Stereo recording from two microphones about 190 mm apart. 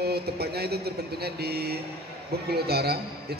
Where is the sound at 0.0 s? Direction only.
55° right (ahead or behind).